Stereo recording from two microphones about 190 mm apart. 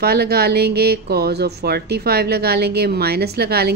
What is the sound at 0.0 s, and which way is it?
Speech, 55° right (ahead or behind).